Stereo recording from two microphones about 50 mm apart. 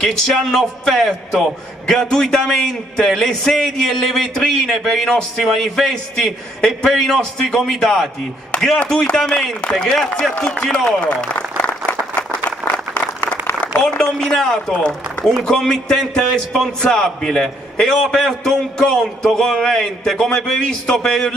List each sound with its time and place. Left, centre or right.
0.0 s a man's voice: centre
11.1 s speech: left
12.2 s applause: centre
13.6 s a man's voice: centre